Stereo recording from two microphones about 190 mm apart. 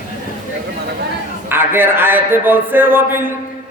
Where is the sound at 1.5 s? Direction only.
10° right (ahead or behind).